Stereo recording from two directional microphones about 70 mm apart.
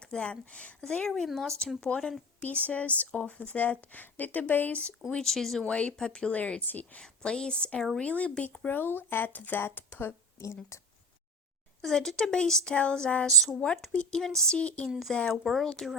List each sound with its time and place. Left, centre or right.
0.0 s a woman's voice: centre
5.1 s speech: centre; by 10.4 s left
10.4 s speech: left
11.8 s speech: centre
13.2 s speech: centre
13.9 s speech: centre
14.8 s speech: centre
15.1 s speech: centre